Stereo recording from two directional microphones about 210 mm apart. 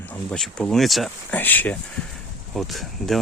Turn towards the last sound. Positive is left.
turn(degrees=0)  # may be behind; listen again after turning